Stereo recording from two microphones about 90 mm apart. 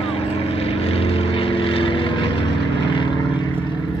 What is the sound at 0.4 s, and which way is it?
Vehicle, 90° left.